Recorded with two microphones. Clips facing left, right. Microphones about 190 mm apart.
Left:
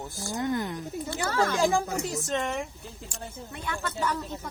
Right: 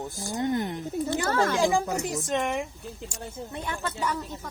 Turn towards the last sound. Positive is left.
turn(degrees=-20)  # may be behind; listen again after turning